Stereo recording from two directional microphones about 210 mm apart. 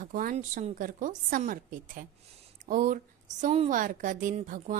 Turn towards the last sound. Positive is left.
turn(degrees=-40)  # may be behind; listen again after turning